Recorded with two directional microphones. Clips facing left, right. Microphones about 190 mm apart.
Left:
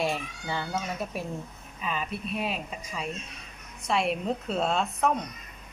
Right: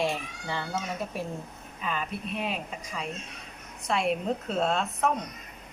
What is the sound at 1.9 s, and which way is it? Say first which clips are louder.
Speech: left 1 dB; 5° left (ahead or behind).